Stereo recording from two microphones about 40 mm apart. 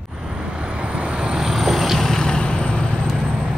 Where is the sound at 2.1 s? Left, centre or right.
Centre.